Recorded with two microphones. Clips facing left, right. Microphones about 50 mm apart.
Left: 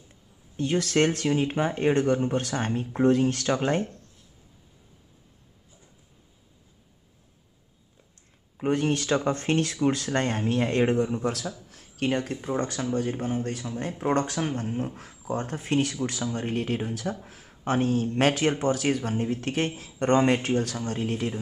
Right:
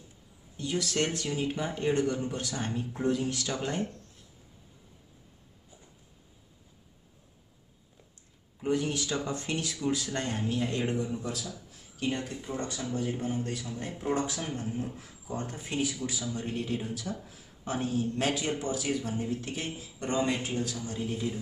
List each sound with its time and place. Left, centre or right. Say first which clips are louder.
0.6 s speech: left 7 dB; left
8.5 s speech: left 5 dB; left